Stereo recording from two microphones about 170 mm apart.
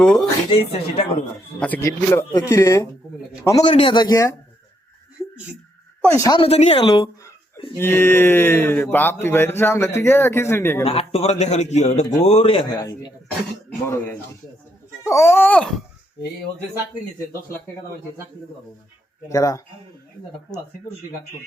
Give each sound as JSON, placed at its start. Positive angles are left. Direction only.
{"t": 0.0, "sound": "speech", "side_deg": 5}
{"t": 0.5, "sound": "a man's voice", "side_deg": 35}
{"t": 1.5, "sound": "speech", "side_deg": 10}
{"t": 3.7, "sound": "speech", "side_deg": 30}
{"t": 6.0, "sound": "speech", "side_deg": 15}
{"t": 6.4, "sound": "a man's voice", "side_deg": 40}
{"t": 7.8, "sound": "speech", "side_deg": 15}
{"t": 10.8, "sound": "a man's voice", "side_deg": 35}
{"t": 12.8, "sound": "speech", "side_deg": 20}
{"t": 19.3, "sound": "speech", "side_deg": 20}